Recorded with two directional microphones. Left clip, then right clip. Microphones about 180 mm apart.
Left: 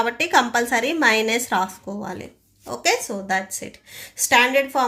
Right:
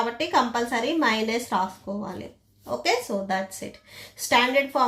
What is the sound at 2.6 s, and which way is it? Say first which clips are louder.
A woman's voice: left 3 dB; 25° left (ahead or behind).